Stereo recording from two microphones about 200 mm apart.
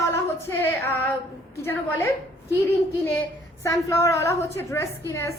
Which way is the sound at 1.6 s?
10° left (ahead or behind).